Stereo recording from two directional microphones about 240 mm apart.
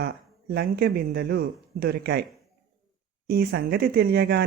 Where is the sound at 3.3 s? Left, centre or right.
Right.